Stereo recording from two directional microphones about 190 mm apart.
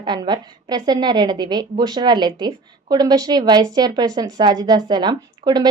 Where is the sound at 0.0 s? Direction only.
25° right (ahead or behind).